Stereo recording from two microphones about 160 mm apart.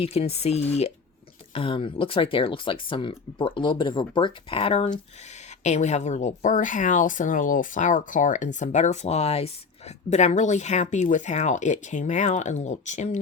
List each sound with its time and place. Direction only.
0.0 s speech: 40° left (ahead or behind)